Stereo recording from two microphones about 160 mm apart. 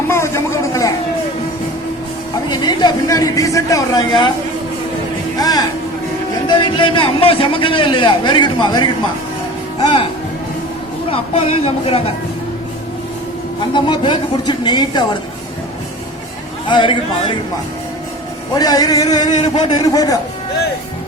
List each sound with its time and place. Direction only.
0.1 s a sound: 15° left (ahead or behind)
2.5 s speech: 25° left (ahead or behind)
5.4 s music: 25° left (ahead or behind)
6.5 s a man's voice: 30° left (ahead or behind)
11.1 s a man's voice: 40° left (ahead or behind)
13.7 s speech: 30° left (ahead or behind)
16.6 s a man's voice: 30° left (ahead or behind)
18.5 s speech: 25° left (ahead or behind)